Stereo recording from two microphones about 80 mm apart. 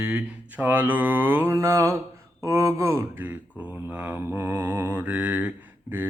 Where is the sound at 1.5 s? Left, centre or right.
Right.